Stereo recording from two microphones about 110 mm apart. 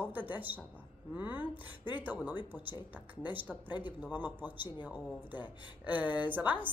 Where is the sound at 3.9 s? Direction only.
15° right (ahead or behind).